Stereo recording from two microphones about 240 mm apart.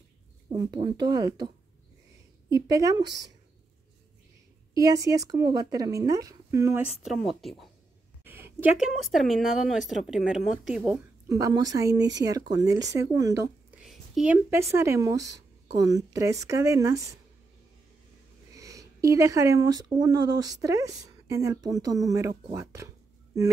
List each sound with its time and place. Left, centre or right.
0.5 s speech: centre
2.5 s speech: centre
4.7 s speech: centre
18.5 s speech: centre